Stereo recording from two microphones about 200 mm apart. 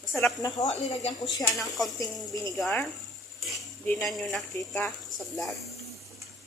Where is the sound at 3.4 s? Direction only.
Centre (ahead or behind).